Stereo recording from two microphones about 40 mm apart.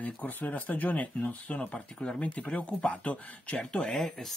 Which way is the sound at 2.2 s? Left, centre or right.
Left.